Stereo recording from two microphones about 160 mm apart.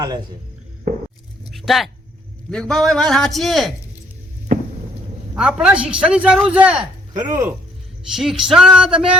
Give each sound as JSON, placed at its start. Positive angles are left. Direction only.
{"t": 1.5, "sound": "a sound", "side_deg": 0}
{"t": 2.5, "sound": "a man's voice", "side_deg": 5}
{"t": 5.3, "sound": "speech", "side_deg": -5}
{"t": 7.1, "sound": "speech", "side_deg": -20}
{"t": 8.1, "sound": "a man's voice", "side_deg": 0}